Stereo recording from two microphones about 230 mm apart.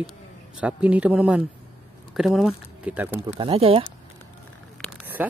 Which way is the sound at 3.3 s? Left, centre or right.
Right.